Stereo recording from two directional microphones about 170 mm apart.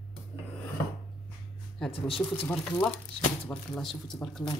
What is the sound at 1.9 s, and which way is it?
Speech, 35° left (ahead or behind).